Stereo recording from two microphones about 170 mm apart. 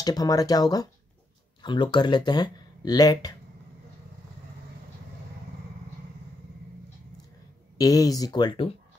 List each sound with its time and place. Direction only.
0.0 s speech: 20° left (ahead or behind)
7.7 s speech: 20° left (ahead or behind)